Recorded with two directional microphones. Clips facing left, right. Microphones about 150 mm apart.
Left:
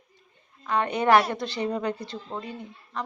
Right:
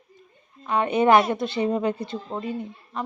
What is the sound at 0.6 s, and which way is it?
Speech, 20° right (ahead or behind).